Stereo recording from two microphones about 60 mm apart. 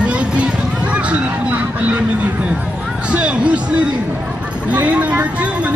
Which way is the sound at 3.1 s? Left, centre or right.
Centre.